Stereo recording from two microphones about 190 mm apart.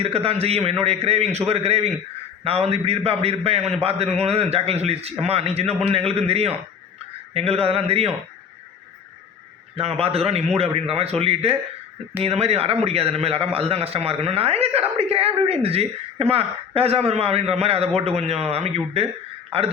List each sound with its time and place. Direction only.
0.0 s a man's voice: 30° right (ahead or behind)
9.7 s a man's voice: 30° right (ahead or behind)